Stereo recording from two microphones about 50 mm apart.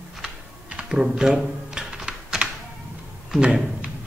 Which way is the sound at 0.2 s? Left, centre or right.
Centre.